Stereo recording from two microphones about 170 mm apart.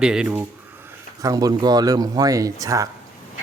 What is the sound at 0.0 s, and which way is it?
Speech, 5° right (ahead or behind).